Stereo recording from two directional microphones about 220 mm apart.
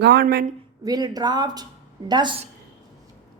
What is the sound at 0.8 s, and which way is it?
A woman's voice, 15° right (ahead or behind).